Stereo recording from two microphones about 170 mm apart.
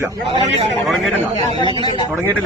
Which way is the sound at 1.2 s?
25° right (ahead or behind).